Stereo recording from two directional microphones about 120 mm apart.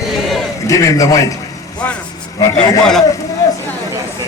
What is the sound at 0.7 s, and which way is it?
Speech, 25° left (ahead or behind).